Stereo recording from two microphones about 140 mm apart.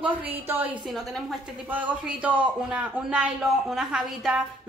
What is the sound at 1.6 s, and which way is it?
A man's voice, 10° right (ahead or behind).